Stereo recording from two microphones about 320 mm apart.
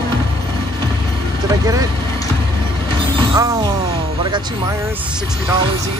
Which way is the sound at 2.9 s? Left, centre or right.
Centre.